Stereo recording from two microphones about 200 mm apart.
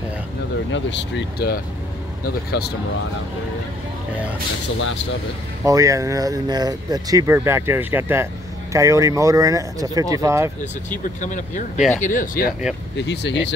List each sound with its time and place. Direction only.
0.7 s speech: 65° left (ahead or behind); by 2.7 s 50° left (ahead or behind)
5.7 s speech: 15° right (ahead or behind)
11.1 s speech: 40° left (ahead or behind)
12.9 s speech: 60° left (ahead or behind)